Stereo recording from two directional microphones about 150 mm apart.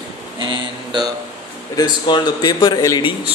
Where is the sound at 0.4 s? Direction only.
30° right (ahead or behind).